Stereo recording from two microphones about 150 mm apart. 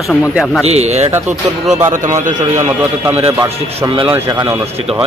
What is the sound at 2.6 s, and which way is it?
A man's voice, 15° right (ahead or behind).